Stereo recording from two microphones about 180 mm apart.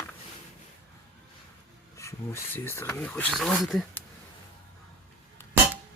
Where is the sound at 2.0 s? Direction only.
15° left (ahead or behind).